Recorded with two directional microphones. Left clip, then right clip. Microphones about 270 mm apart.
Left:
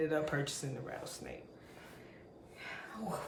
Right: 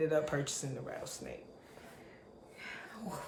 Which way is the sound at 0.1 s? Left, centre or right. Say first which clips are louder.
Right 2 dB; centre.